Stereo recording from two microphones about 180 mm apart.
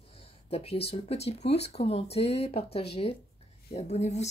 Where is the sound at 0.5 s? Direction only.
35° left (ahead or behind).